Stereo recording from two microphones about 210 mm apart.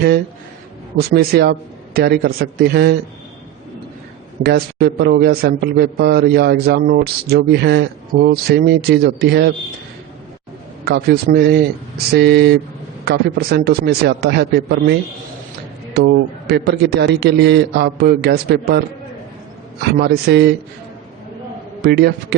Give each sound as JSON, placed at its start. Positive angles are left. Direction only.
{"t": 0.9, "sound": "a man's voice", "side_deg": -50}
{"t": 4.4, "sound": "a man's voice", "side_deg": -50}
{"t": 10.8, "sound": "a man's voice", "side_deg": -50}
{"t": 16.5, "sound": "a man's voice", "side_deg": -50}
{"t": 19.8, "sound": "a man's voice", "side_deg": -50}
{"t": 21.8, "sound": "a man's voice", "side_deg": -50}